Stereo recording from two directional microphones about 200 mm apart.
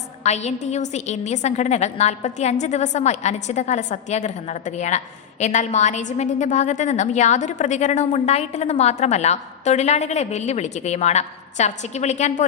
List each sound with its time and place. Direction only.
0.2 s a woman's voice: 35° left (ahead or behind)